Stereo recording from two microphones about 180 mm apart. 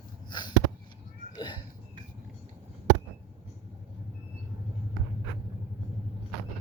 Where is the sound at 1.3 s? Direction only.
25° left (ahead or behind).